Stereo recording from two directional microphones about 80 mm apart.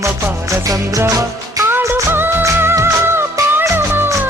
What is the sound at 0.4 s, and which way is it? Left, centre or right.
Music, right.